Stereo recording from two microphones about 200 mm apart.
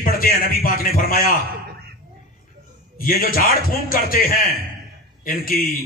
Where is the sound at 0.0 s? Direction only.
45° left (ahead or behind).